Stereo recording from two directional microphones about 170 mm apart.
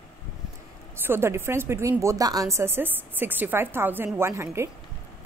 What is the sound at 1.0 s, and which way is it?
A woman's voice, 15° right (ahead or behind).